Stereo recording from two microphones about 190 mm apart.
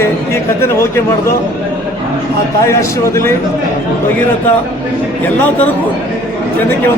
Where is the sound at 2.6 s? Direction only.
15° left (ahead or behind).